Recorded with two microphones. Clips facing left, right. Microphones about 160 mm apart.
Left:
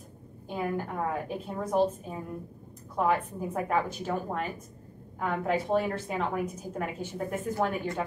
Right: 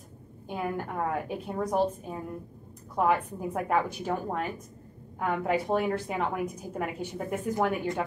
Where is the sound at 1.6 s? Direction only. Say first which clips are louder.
Left 1 dB; 15° right (ahead or behind).